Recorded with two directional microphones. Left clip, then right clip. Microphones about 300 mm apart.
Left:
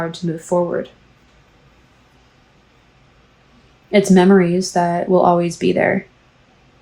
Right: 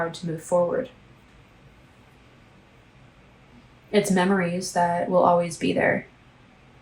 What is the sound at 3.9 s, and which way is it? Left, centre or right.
Speech, left.